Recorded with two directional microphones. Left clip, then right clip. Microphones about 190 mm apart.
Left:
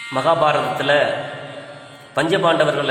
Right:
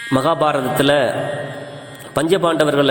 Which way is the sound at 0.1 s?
40° right (ahead or behind).